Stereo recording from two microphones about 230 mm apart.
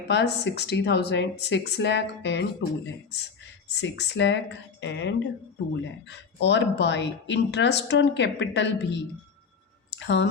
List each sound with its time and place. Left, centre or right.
0.1 s speech: left